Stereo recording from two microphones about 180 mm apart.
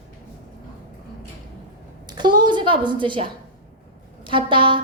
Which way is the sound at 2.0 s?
25° right (ahead or behind).